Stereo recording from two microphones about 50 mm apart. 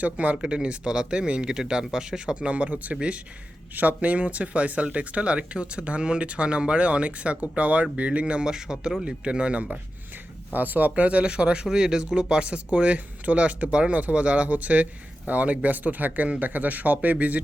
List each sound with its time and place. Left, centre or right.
0.0 s speech: right
10.5 s speech: right